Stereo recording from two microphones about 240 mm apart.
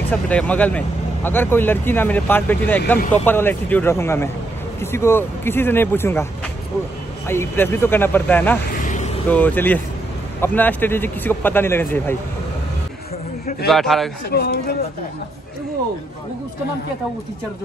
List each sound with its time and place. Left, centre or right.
0.1 s speech: centre
7.2 s speech: centre
8.7 s vehicle: left
9.3 s speech: centre
13.7 s a man's voice: centre
14.3 s speech: left